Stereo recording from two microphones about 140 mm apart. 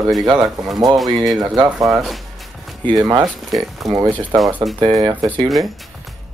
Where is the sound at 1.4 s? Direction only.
30° right (ahead or behind).